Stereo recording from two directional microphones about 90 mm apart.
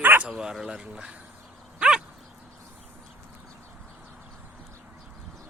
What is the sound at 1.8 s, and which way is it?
Dog, 5° right (ahead or behind).